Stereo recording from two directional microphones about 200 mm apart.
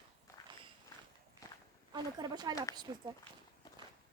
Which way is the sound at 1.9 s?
20° right (ahead or behind).